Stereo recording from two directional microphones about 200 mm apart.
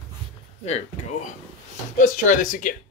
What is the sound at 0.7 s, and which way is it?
Speech, 30° left (ahead or behind).